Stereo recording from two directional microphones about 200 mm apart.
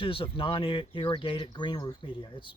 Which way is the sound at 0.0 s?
25° left (ahead or behind).